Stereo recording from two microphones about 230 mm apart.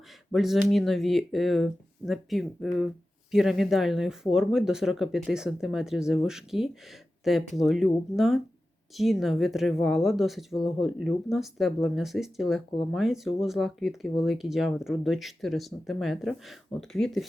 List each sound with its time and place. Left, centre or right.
0.3 s speech: centre